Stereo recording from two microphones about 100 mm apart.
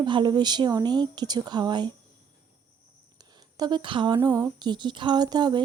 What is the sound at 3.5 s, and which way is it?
Speech, 45° right (ahead or behind).